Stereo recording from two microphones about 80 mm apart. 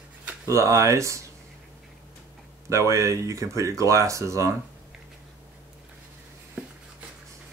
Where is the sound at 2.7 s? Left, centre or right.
Right.